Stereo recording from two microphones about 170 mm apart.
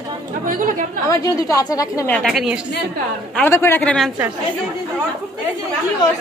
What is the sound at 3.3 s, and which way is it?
Speech, 15° left (ahead or behind).